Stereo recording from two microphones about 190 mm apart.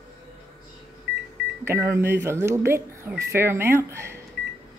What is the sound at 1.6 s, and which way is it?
Speech, 15° right (ahead or behind).